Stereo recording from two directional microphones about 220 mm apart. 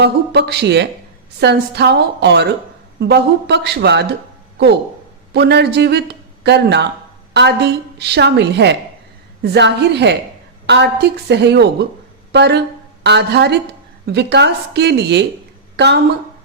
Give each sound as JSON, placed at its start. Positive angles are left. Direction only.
{"t": 0.0, "sound": "a woman's voice", "side_deg": -50}
{"t": 5.3, "sound": "a woman's voice", "side_deg": -50}